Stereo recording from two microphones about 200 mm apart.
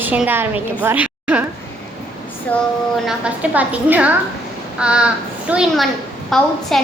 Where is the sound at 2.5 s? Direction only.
10° left (ahead or behind).